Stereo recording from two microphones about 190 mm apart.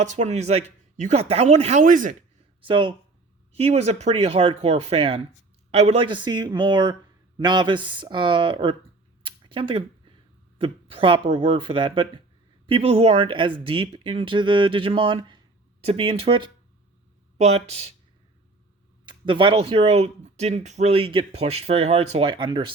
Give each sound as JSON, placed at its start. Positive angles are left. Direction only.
{"t": 0.0, "sound": "speech", "side_deg": -35}
{"t": 2.6, "sound": "speech", "side_deg": -25}
{"t": 9.2, "sound": "a sound", "side_deg": -25}
{"t": 10.6, "sound": "speech", "side_deg": -30}
{"t": 19.0, "sound": "speech", "side_deg": -25}